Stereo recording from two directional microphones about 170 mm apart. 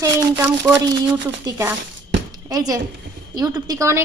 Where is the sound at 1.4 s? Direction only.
20° right (ahead or behind).